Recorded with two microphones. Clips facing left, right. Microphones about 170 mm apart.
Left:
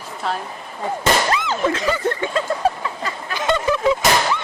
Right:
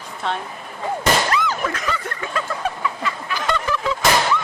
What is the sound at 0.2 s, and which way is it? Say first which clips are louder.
Speech: even; centre (ahead or behind).